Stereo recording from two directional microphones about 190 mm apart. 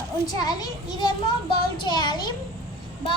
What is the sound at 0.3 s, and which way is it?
A child's voice, 20° left (ahead or behind).